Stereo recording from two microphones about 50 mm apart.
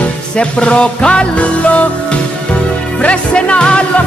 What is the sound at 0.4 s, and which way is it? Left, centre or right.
Music, left.